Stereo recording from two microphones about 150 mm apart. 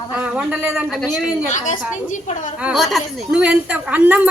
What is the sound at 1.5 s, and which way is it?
A woman's voice, 55° left (ahead or behind).